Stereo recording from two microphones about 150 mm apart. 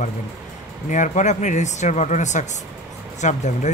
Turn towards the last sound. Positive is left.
turn(degrees=50)  # may be behind; listen again after turning